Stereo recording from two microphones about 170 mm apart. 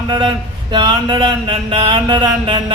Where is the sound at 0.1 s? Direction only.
25° right (ahead or behind).